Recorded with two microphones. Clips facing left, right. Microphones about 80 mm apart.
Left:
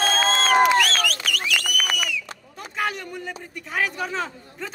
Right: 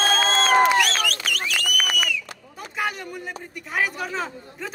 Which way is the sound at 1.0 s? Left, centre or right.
Right.